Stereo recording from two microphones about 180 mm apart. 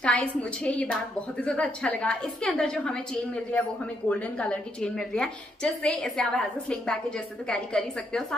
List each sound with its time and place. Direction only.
0.0 s a woman's voice: 5° left (ahead or behind)
4.1 s a woman's voice: 5° left (ahead or behind)